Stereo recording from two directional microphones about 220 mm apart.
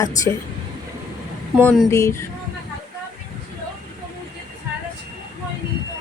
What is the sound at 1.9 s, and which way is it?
Speech, 15° left (ahead or behind).